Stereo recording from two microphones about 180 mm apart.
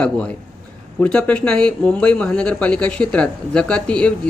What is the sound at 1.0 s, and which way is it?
Speech, 5° left (ahead or behind).